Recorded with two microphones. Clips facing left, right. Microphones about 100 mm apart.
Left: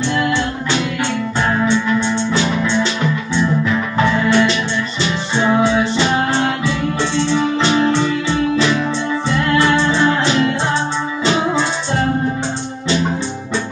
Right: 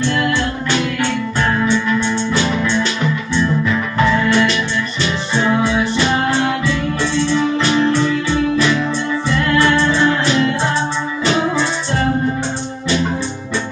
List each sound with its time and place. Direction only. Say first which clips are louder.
1.5 s music: left 1 dB; 15° left (ahead or behind)
4.2 s music: left 1 dB; 15° left (ahead or behind)
7.3 s music: left 1 dB; 10° left (ahead or behind)